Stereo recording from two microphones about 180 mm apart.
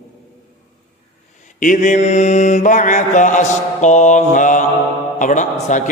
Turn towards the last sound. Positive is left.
turn(degrees=45)  # may be behind; listen again after turning